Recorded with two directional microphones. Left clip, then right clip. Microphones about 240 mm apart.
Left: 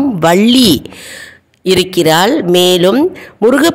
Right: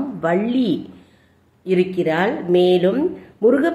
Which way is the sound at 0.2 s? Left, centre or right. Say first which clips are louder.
Left 11 dB; left.